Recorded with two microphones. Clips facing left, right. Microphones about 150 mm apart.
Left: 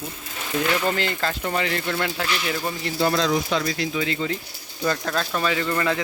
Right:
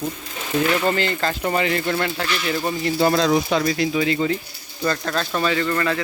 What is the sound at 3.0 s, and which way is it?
Speech, 45° right (ahead or behind).